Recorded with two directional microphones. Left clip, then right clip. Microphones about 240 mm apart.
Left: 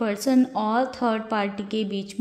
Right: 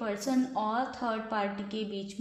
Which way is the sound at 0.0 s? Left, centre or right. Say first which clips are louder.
Left 9 dB; left.